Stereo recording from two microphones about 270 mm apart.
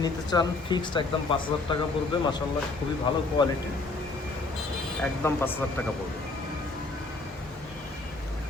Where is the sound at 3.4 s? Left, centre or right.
Centre.